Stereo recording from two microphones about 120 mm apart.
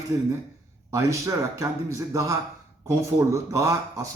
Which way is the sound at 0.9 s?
25° right (ahead or behind).